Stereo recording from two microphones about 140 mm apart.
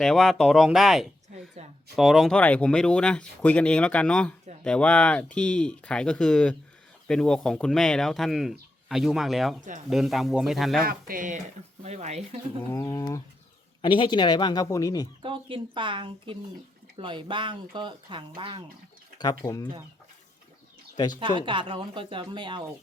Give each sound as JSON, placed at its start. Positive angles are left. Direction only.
{"t": 0.0, "sound": "speech", "side_deg": 0}
{"t": 1.6, "sound": "a sound", "side_deg": -50}
{"t": 2.0, "sound": "speech", "side_deg": 0}
{"t": 10.8, "sound": "speech", "side_deg": -85}
{"t": 11.8, "sound": "speech", "side_deg": -50}
{"t": 12.7, "sound": "speech", "side_deg": 20}
{"t": 13.8, "sound": "speech", "side_deg": 35}
{"t": 15.2, "sound": "speech", "side_deg": -40}
{"t": 19.2, "sound": "speech", "side_deg": 25}
{"t": 20.9, "sound": "speech", "side_deg": 30}
{"t": 21.2, "sound": "speech", "side_deg": -35}